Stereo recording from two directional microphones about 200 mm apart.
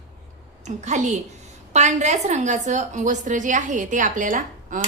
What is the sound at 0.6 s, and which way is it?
A woman's voice, 35° right (ahead or behind).